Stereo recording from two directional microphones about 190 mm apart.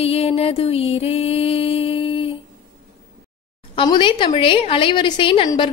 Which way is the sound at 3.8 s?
25° left (ahead or behind).